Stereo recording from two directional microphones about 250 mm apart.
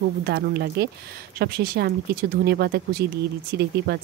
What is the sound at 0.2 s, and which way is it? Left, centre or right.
Speech, right.